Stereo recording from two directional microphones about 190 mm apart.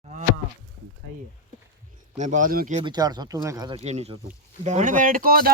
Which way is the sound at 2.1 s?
40° right (ahead or behind).